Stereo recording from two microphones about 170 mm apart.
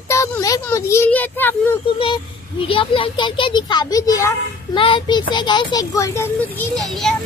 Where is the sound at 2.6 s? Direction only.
30° left (ahead or behind).